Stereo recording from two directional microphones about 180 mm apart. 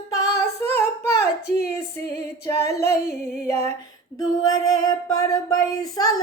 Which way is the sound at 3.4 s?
15° left (ahead or behind).